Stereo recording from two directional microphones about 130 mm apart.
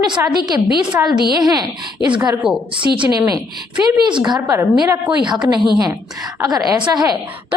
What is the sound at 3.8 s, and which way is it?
A woman's voice, 35° right (ahead or behind).